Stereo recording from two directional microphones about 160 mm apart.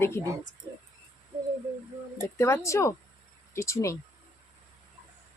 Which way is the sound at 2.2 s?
20° left (ahead or behind).